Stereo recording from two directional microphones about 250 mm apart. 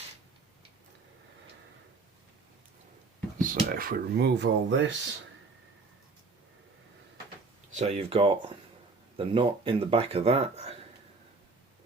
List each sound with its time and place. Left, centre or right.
3.4 s speech: right
7.7 s speech: right